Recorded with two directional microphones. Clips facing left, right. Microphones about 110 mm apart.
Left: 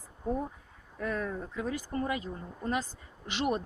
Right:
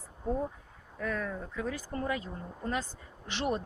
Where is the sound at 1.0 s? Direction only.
20° left (ahead or behind).